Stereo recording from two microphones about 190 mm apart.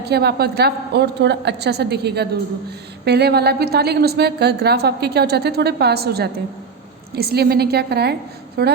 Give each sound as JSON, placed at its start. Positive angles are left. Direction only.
{"t": 0.0, "sound": "a woman's voice", "side_deg": -60}